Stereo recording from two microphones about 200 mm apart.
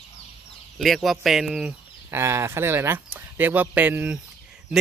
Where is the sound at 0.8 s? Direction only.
Centre (ahead or behind).